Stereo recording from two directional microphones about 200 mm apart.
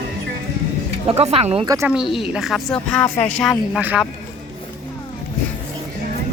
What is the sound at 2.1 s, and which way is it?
Speech, centre (ahead or behind).